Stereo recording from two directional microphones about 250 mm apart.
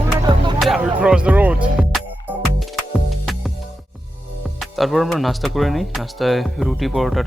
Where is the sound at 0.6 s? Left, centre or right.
Centre.